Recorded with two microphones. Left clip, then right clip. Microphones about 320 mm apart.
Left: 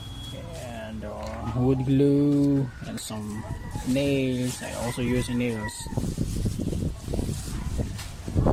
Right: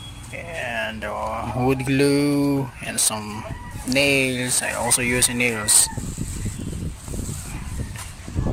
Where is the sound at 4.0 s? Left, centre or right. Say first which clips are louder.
Right 8 dB; right.